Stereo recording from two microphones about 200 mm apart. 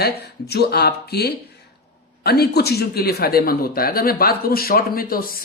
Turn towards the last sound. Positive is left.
turn(degrees=45)  # may be behind; listen again after turning